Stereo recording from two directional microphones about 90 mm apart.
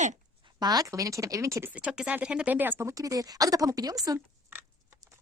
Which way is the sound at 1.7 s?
10° right (ahead or behind).